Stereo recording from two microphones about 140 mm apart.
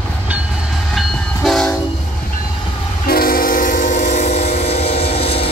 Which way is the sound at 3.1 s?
90° left.